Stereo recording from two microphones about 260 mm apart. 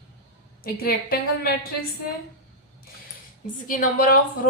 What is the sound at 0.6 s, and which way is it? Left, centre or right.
A woman's voice, left.